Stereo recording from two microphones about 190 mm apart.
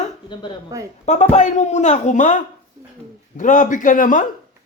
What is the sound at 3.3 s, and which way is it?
Speech, 40° left (ahead or behind).